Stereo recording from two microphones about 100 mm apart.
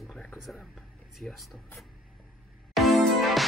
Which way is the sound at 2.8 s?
Centre (ahead or behind).